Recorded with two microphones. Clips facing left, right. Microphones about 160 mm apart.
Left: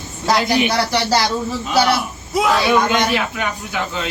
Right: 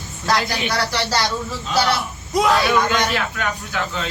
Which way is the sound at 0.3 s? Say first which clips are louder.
Left 5 dB; 20° left (ahead or behind).